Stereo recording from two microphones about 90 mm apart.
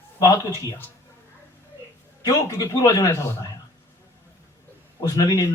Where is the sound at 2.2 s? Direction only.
40° left (ahead or behind).